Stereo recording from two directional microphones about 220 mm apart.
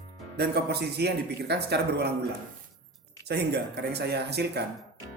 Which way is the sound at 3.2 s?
50° right (ahead or behind).